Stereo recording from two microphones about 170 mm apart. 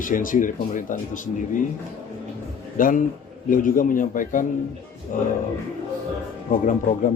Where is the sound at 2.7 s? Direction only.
55° left (ahead or behind).